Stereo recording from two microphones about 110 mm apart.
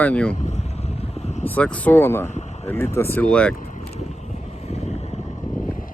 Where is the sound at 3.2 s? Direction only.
10° left (ahead or behind).